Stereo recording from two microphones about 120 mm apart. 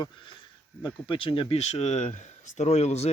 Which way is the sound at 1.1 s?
50° left (ahead or behind).